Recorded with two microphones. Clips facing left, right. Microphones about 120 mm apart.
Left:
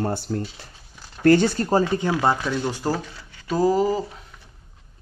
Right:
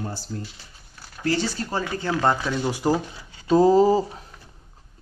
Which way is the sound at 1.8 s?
20° left (ahead or behind).